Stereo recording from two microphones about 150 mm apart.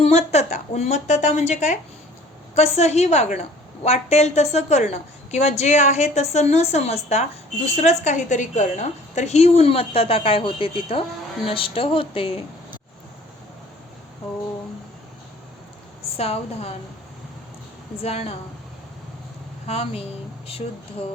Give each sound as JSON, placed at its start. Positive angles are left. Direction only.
{"t": 0.0, "sound": "a woman's voice", "side_deg": 45}
{"t": 16.1, "sound": "a woman's voice", "side_deg": 40}
{"t": 18.0, "sound": "a woman's voice", "side_deg": 40}
{"t": 19.6, "sound": "a woman's voice", "side_deg": 40}